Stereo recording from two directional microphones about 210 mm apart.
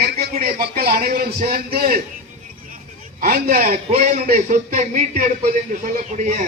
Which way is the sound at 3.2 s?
40° right (ahead or behind).